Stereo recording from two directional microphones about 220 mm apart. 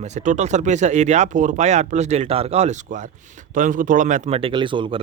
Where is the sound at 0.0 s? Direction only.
35° right (ahead or behind).